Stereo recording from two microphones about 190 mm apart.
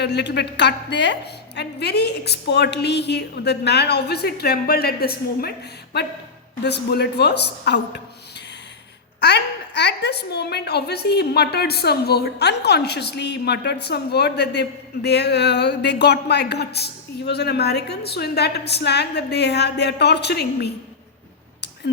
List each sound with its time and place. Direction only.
0.0 s a woman's voice: 60° left (ahead or behind)
9.2 s a woman's voice: 60° left (ahead or behind)